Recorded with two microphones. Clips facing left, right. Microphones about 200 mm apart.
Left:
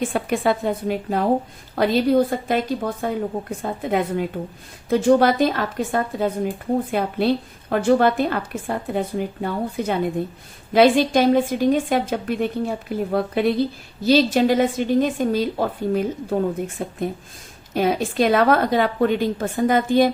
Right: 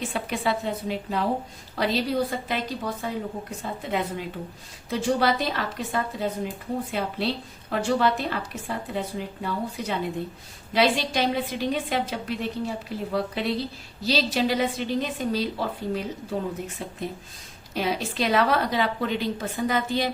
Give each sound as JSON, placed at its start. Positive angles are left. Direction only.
{"t": 0.0, "sound": "a woman's voice", "side_deg": 50}